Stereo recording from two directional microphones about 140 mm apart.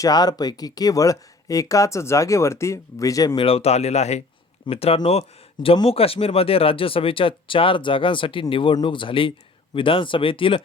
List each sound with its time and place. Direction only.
0.0 s speech: 30° left (ahead or behind)
3.3 s speech: 45° left (ahead or behind)